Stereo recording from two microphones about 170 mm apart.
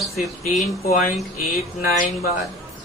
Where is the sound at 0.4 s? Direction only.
45° left (ahead or behind).